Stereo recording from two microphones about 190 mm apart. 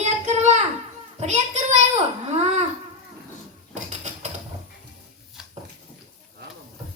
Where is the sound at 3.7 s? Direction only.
35° right (ahead or behind).